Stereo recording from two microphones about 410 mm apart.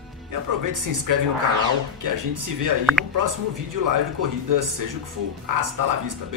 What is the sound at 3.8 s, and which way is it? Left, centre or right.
Speech, right.